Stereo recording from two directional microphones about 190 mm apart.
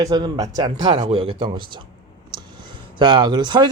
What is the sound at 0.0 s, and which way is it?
Speech, 20° right (ahead or behind).